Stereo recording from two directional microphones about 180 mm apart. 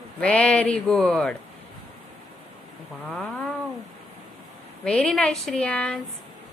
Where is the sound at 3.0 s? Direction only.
10° left (ahead or behind).